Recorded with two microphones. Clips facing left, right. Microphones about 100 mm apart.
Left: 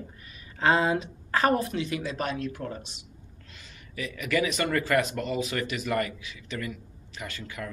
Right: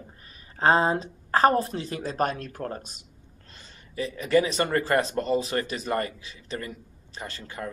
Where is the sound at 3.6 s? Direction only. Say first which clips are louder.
Right 5 dB; 35° right (ahead or behind).